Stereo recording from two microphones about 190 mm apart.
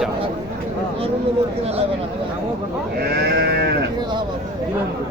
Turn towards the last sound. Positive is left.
turn(degrees=-60)  # may be behind; listen again after turning